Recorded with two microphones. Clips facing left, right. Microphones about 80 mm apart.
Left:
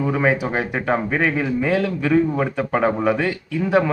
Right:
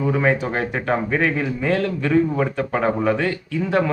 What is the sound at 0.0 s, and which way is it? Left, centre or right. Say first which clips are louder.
Speech: even; centre.